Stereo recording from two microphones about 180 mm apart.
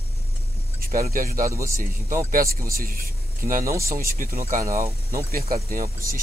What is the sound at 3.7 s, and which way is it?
Speech, 15° right (ahead or behind).